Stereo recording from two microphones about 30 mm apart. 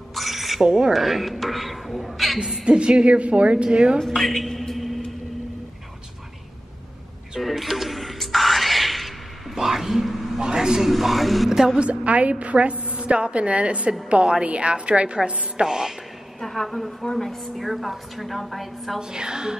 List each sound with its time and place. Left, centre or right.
0.1 s filing: centre
0.7 s a woman's voice: right
0.9 s a woman's voice: centre
2.6 s a woman's voice: right
3.6 s a woman's voice: right
4.1 s a woman's voice: centre
7.3 s a sound: centre
10.4 s a man's voice: right
10.9 s a woman's voice: centre
11.5 s a woman's voice: centre
11.8 s a woman's voice: right
15.6 s a woman's voice: right
16.3 s a woman's voice: centre
18.9 s a woman's voice: right